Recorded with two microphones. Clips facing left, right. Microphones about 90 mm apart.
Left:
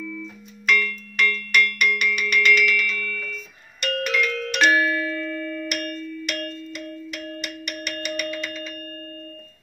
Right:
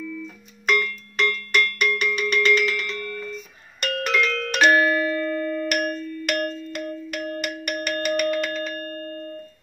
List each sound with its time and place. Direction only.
0.7 s cowbell: 30° right (ahead or behind)
3.8 s music: 40° right (ahead or behind)
5.0 s a sound: 15° right (ahead or behind)
5.7 s ding: 60° right (ahead or behind)